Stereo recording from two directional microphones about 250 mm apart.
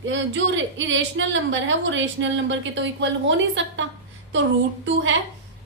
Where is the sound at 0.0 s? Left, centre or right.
Right.